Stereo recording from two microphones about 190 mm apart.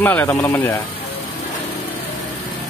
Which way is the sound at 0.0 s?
10° left (ahead or behind).